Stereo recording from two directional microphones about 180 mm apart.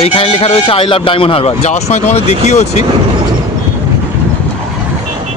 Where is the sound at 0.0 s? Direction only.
35° left (ahead or behind).